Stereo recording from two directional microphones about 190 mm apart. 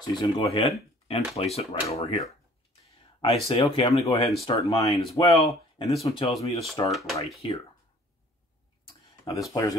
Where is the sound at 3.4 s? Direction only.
30° left (ahead or behind).